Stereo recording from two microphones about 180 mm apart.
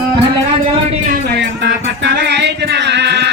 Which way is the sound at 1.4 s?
75° right (ahead or behind).